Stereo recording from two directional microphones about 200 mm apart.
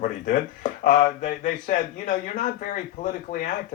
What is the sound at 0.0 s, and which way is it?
Speech, 40° left (ahead or behind).